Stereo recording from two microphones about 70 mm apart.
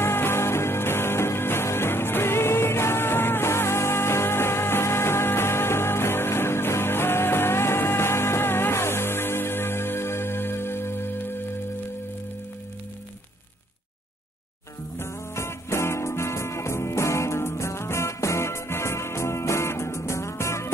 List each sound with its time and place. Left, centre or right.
0.0 s music: left
15.0 s music: left